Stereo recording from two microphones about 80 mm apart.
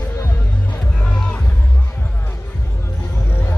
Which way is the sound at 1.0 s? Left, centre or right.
Centre.